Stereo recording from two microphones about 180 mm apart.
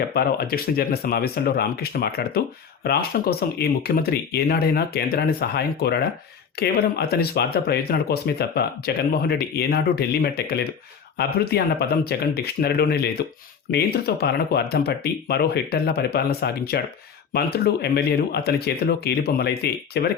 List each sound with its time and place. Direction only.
0.1 s speech: 60° left (ahead or behind)